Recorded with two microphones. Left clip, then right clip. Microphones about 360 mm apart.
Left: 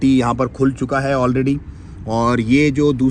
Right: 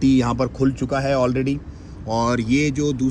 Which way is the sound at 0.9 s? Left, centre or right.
Left.